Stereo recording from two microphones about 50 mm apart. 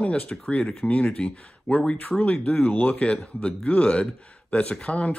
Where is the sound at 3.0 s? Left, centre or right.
Left.